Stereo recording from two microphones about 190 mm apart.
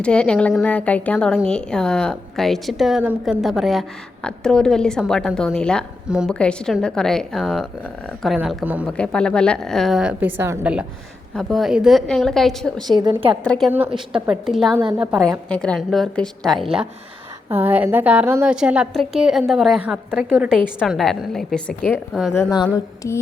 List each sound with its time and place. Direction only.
0.0 s a woman's voice: 5° left (ahead or behind)
8.9 s a woman's voice: 5° left (ahead or behind)
12.9 s a woman's voice: 25° right (ahead or behind)
13.4 s a woman's voice: 5° left (ahead or behind)
13.7 s a woman's voice: 10° right (ahead or behind)
22.4 s speech: 20° left (ahead or behind)